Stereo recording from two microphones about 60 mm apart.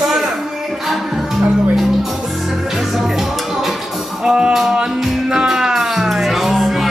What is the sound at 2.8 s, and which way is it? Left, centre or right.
Music, centre.